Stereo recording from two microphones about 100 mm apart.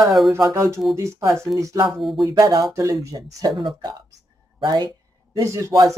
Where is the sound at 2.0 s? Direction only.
Centre (ahead or behind).